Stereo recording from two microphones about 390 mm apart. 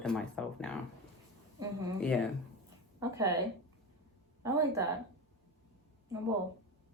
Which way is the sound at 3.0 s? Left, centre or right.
Centre.